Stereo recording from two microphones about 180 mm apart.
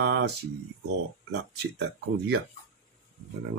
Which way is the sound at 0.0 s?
65° right (ahead or behind).